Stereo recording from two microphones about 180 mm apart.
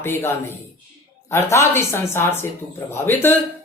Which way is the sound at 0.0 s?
15° left (ahead or behind).